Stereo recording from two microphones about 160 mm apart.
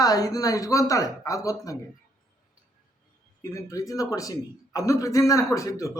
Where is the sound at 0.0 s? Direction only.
20° left (ahead or behind).